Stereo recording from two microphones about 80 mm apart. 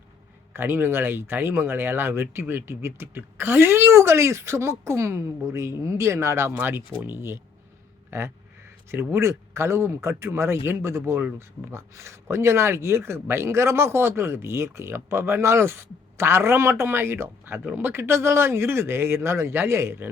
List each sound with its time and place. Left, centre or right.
0.5 s speech: right
17.9 s speech: right